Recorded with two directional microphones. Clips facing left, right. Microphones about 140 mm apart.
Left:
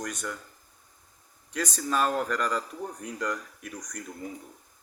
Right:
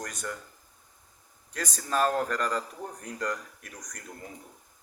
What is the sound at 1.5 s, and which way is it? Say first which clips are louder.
Speech: left 1 dB; 40° right (ahead or behind).